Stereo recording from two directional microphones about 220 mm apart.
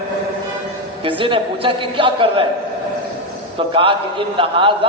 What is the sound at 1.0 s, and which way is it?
A man's voice, 25° right (ahead or behind).